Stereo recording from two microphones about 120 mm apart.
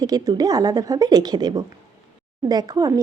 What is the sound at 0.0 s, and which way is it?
A woman's voice, 35° right (ahead or behind).